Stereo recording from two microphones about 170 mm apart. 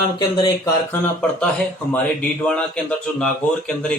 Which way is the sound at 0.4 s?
20° left (ahead or behind).